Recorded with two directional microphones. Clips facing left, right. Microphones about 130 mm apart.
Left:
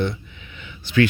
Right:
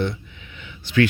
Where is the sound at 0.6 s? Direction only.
20° left (ahead or behind).